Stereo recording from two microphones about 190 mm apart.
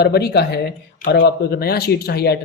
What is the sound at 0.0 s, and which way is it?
Speech, 55° left (ahead or behind).